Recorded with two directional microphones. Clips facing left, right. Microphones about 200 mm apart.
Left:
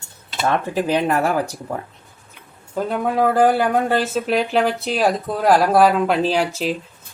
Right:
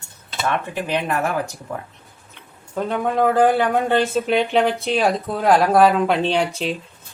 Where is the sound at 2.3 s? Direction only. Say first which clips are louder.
Left 2 dB; 5° left (ahead or behind).